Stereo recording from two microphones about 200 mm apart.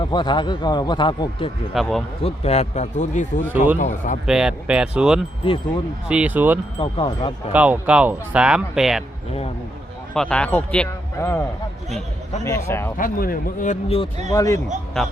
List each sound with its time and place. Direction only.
0.0 s speech: 20° left (ahead or behind)
1.7 s speech: centre (ahead or behind)
2.2 s a man's voice: 30° left (ahead or behind)
4.3 s speech: 5° right (ahead or behind)
5.4 s speech: 25° left (ahead or behind)
6.1 s speech: 5° right (ahead or behind)
6.7 s speech: 25° left (ahead or behind)
7.5 s speech: 5° right (ahead or behind)
10.2 s speech: 5° left (ahead or behind)
12.5 s speech: 15° left (ahead or behind)
13.0 s a man's voice: 45° left (ahead or behind)
14.3 s speech: 15° left (ahead or behind)